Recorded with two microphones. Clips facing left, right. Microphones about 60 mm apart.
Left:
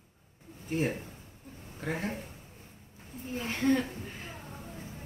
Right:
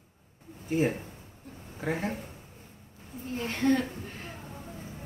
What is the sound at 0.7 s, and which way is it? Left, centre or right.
Speech, centre.